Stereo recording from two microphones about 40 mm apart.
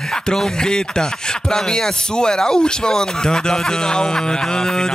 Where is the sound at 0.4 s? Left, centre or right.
Centre.